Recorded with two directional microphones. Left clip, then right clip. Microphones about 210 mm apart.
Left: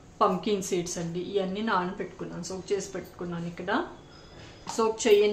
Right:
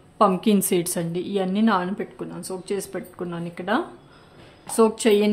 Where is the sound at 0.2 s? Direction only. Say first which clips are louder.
Right 6 dB; 55° right (ahead or behind).